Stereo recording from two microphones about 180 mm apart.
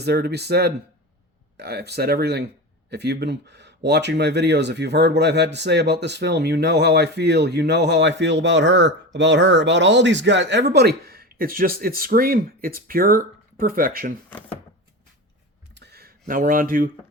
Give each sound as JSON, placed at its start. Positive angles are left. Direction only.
{"t": 0.0, "sound": "speech", "side_deg": -65}
{"t": 14.3, "sound": "speech", "side_deg": 10}
{"t": 15.7, "sound": "a sound", "side_deg": -65}